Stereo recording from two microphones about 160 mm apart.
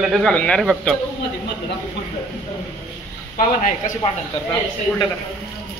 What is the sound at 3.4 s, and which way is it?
Speech, 50° left (ahead or behind).